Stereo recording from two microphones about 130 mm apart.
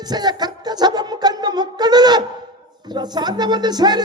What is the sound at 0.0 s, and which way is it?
Music, 30° right (ahead or behind).